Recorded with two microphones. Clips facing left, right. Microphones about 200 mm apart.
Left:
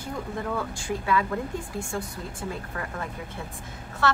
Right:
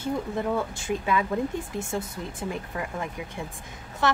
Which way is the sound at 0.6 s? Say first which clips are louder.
Right 2 dB; 20° right (ahead or behind).